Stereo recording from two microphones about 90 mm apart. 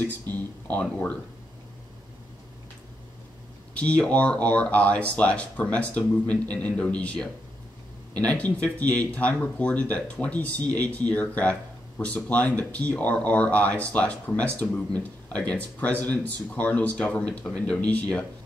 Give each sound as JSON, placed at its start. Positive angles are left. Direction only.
{"t": 0.3, "sound": "speech", "side_deg": 20}
{"t": 3.7, "sound": "speech", "side_deg": 15}
{"t": 8.3, "sound": "speech", "side_deg": 15}